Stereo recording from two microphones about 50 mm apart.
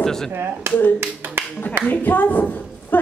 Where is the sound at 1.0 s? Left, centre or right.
Right.